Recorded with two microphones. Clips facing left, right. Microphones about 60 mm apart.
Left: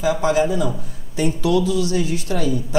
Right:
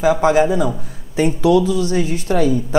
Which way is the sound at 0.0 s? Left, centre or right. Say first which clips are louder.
Right 4 dB; right.